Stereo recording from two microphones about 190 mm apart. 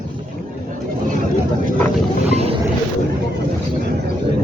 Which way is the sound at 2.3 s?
35° right (ahead or behind).